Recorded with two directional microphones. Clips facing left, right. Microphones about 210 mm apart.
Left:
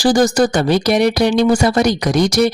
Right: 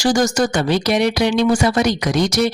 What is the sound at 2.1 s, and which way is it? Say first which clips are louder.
Speech: left 3 dB; 10° left (ahead or behind).